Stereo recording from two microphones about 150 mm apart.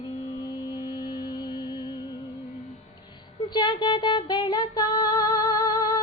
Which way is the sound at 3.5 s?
30° left (ahead or behind).